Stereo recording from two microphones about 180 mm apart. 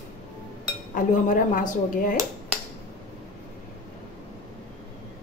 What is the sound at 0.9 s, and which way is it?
Speech, 50° left (ahead or behind).